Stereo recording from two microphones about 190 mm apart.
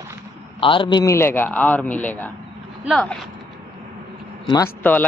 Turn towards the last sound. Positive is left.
turn(degrees=10)  # may be behind; listen again after turning